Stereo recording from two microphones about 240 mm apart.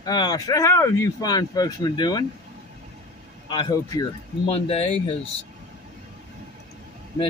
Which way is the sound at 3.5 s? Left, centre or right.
Centre.